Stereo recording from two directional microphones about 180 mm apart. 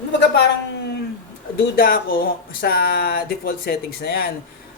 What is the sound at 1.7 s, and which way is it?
Speech, 55° left (ahead or behind).